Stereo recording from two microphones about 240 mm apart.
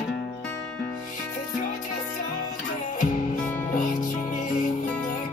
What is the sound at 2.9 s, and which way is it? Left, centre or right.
Music, left.